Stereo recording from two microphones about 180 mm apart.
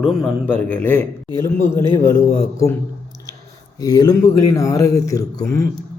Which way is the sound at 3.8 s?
20° left (ahead or behind).